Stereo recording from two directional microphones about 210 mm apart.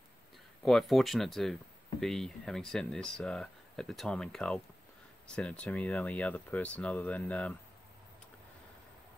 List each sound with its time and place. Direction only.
0.7 s speech: centre (ahead or behind)